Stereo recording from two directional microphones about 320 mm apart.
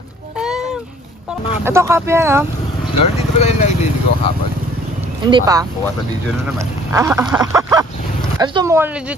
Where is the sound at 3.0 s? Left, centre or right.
Centre.